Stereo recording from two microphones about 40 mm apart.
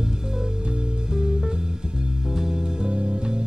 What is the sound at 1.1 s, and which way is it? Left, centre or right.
Music, centre.